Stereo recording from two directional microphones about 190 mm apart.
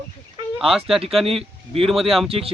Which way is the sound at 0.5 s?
Centre (ahead or behind).